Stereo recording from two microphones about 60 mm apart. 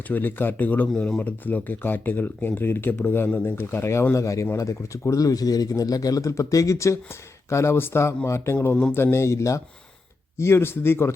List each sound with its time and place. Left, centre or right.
0.1 s speech: left
4.1 s speech: left
10.3 s speech: left